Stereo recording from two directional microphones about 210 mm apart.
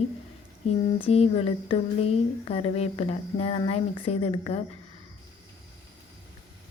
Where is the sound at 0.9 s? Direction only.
25° left (ahead or behind).